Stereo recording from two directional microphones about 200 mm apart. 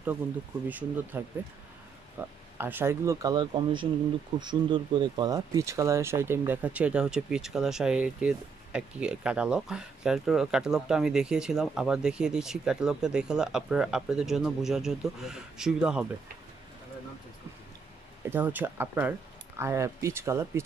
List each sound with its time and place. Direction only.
0.7 s speech: 10° right (ahead or behind)
18.2 s speech: 10° right (ahead or behind)